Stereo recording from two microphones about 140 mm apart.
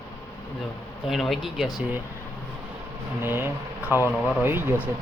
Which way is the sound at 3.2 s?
15° right (ahead or behind).